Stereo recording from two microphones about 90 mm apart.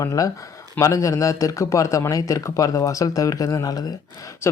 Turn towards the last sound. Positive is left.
turn(degrees=30)  # may be behind; listen again after turning